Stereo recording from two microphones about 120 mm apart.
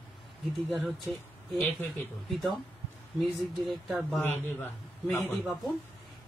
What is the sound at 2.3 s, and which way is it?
Speech, centre (ahead or behind).